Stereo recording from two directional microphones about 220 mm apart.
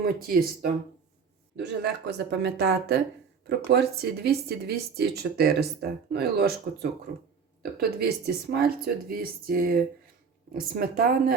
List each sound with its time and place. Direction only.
0.0 s speech: 40° right (ahead or behind)
7.6 s speech: 45° right (ahead or behind)